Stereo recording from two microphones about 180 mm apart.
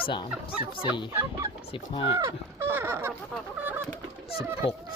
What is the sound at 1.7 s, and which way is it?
Speech, 30° left (ahead or behind).